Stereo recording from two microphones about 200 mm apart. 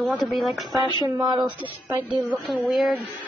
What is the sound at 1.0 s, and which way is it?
Speech, 15° right (ahead or behind).